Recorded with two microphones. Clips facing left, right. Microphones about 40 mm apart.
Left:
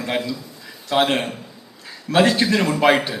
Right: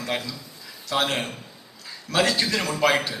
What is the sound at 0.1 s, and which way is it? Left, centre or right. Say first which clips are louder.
A man's voice: left 5 dB; left.